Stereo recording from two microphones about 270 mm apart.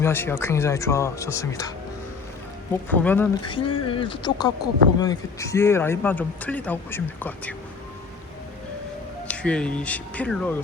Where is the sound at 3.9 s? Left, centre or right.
Centre.